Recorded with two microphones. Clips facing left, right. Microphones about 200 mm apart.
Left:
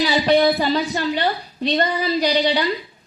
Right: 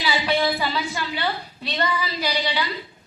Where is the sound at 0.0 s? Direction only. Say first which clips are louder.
Left 7 dB; 45° left (ahead or behind).